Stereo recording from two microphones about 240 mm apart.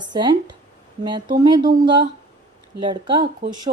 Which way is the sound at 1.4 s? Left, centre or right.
Centre.